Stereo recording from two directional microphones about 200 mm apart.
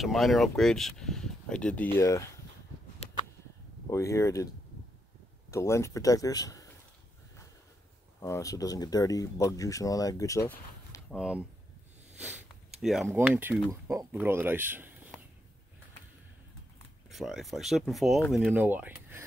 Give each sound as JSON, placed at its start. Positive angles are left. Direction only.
{"t": 0.0, "sound": "speech", "side_deg": 0}
{"t": 3.9, "sound": "speech", "side_deg": 15}
{"t": 5.5, "sound": "speech", "side_deg": 15}
{"t": 8.2, "sound": "speech", "side_deg": 15}
{"t": 10.5, "sound": "a sound", "side_deg": 10}
{"t": 11.1, "sound": "speech", "side_deg": -5}
{"t": 12.2, "sound": "a sound", "side_deg": -5}
{"t": 13.1, "sound": "speech", "side_deg": -10}
{"t": 17.1, "sound": "speech", "side_deg": 0}